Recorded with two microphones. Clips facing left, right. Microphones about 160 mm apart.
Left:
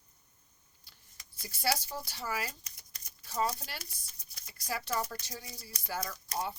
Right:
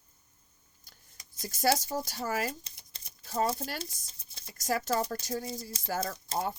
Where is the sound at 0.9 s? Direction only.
45° right (ahead or behind).